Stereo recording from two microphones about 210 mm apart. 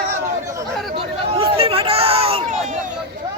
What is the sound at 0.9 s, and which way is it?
Chatter, 25° right (ahead or behind).